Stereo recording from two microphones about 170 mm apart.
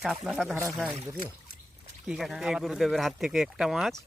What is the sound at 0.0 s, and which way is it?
Speech, centre (ahead or behind).